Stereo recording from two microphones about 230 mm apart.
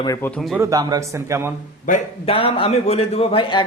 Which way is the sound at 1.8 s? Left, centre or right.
Left.